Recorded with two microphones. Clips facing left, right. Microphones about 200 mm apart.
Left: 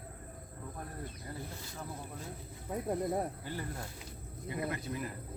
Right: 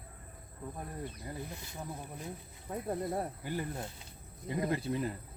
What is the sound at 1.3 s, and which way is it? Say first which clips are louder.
Speech: right 1 dB; 20° right (ahead or behind).